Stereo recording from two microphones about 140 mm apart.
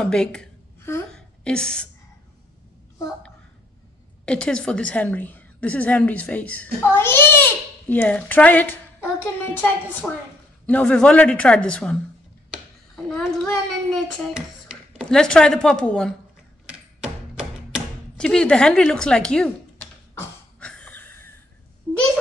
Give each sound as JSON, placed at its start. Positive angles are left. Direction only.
{"t": 0.0, "sound": "a woman's voice", "side_deg": 5}
{"t": 1.1, "sound": "a sound", "side_deg": 5}
{"t": 4.3, "sound": "a woman's voice", "side_deg": 5}
{"t": 16.7, "sound": "a sound", "side_deg": -5}
{"t": 18.2, "sound": "speech", "side_deg": 5}
{"t": 20.6, "sound": "wheeze", "side_deg": 10}